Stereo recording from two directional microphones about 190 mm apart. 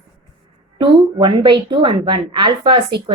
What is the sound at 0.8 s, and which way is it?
A woman's voice, 25° right (ahead or behind).